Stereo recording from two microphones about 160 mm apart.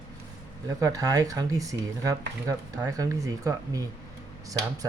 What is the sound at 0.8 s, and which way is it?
Speech, 20° right (ahead or behind).